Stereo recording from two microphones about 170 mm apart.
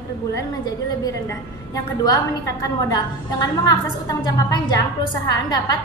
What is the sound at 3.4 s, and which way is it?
A woman's voice, 20° left (ahead or behind).